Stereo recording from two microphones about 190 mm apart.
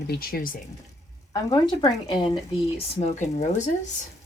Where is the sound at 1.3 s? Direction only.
20° left (ahead or behind).